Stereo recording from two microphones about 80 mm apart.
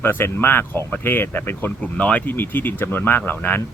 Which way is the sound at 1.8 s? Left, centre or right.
Centre.